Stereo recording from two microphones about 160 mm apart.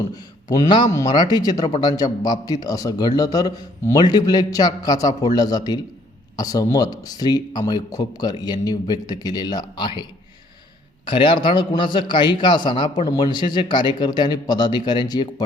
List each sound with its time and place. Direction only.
0.5 s a man's voice: 25° left (ahead or behind)